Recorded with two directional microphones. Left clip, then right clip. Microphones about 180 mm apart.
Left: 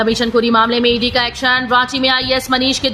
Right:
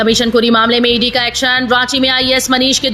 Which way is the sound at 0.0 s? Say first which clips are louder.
Right 3 dB; 10° right (ahead or behind).